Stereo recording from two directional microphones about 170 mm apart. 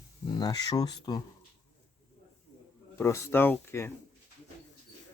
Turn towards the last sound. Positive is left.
turn(degrees=15)  # may be behind; listen again after turning